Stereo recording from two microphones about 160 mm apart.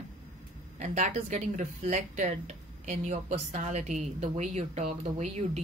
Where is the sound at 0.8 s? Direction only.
45° right (ahead or behind).